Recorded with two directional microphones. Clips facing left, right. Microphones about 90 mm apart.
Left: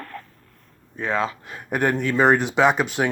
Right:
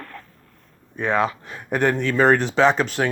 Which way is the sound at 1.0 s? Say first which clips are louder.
Right 3 dB; 25° right (ahead or behind).